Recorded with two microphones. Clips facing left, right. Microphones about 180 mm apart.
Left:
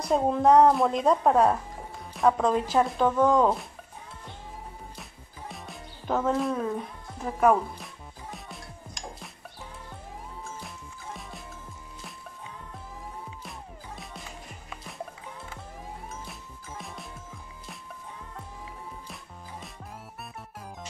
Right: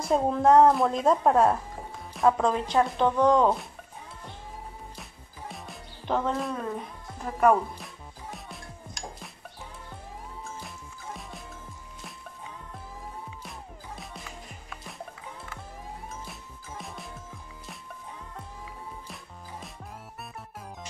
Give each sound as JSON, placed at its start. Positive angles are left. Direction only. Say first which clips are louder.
{"t": 0.0, "sound": "a woman's voice", "louder": "even", "side_deg": 0}
{"t": 5.5, "sound": "music", "louder": "left 1 dB", "side_deg": 0}
{"t": 13.4, "sound": "music", "louder": "even", "side_deg": 0}
{"t": 16.3, "sound": "music", "louder": "even", "side_deg": 0}